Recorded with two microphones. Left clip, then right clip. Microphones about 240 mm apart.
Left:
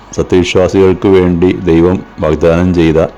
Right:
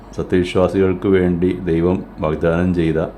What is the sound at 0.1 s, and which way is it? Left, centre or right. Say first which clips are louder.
Speech: left 8 dB; left.